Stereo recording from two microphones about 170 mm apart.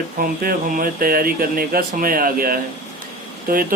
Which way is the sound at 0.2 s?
55° right (ahead or behind).